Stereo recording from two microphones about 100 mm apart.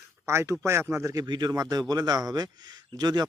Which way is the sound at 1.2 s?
45° right (ahead or behind).